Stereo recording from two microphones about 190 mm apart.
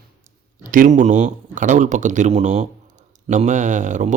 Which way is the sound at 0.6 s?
45° right (ahead or behind).